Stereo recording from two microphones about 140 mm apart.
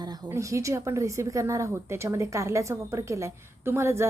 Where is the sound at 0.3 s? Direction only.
20° right (ahead or behind).